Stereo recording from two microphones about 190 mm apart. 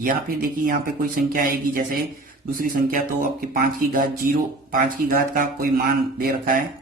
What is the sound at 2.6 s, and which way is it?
Speech, 50° right (ahead or behind).